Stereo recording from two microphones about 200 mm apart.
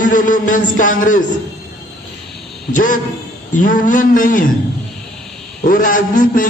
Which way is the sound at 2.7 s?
40° left (ahead or behind).